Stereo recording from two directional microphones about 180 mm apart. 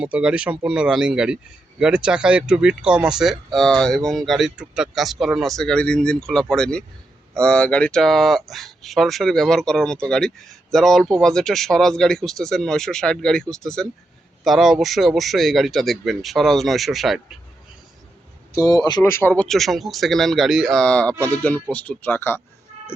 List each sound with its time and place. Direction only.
0.0 s speech: 5° right (ahead or behind)
18.5 s speech: 20° left (ahead or behind)